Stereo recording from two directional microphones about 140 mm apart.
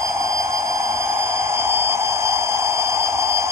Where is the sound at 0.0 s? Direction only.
20° right (ahead or behind).